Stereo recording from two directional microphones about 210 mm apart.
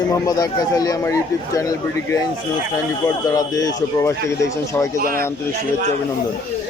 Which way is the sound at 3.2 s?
15° left (ahead or behind).